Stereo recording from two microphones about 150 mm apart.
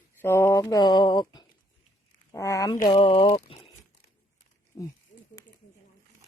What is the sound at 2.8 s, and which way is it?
Speech, 35° left (ahead or behind).